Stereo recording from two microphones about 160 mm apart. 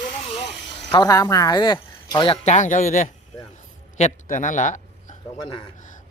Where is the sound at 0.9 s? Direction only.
25° left (ahead or behind).